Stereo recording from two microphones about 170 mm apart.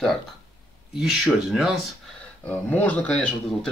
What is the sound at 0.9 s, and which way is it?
Speech, 5° right (ahead or behind).